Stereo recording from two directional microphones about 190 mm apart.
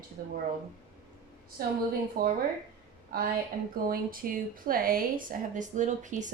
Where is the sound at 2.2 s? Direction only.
50° right (ahead or behind).